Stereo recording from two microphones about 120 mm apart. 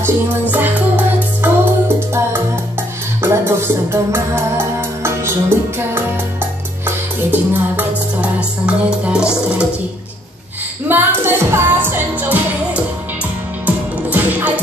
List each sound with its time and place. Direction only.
0.0 s music: 15° right (ahead or behind)
7.2 s music: 15° right (ahead or behind)
10.9 s music: 15° right (ahead or behind)